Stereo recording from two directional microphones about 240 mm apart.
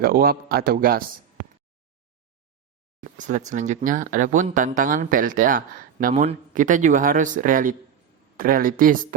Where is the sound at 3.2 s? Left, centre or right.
Right.